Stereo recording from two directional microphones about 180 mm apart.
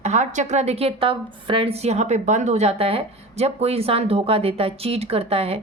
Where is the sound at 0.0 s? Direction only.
40° right (ahead or behind).